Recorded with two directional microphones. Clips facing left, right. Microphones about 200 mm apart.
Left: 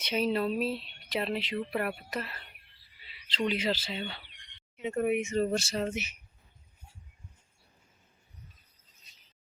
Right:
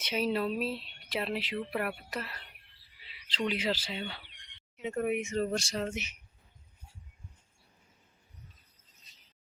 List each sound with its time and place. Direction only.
0.0 s speech: 5° right (ahead or behind)